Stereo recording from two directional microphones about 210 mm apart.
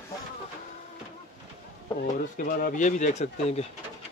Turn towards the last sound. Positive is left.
turn(degrees=30)  # may be behind; listen again after turning